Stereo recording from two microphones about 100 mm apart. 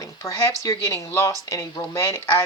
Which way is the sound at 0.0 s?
35° left (ahead or behind).